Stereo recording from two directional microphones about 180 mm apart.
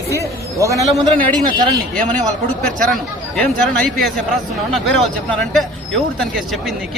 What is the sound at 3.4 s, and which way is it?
Speech, 5° left (ahead or behind).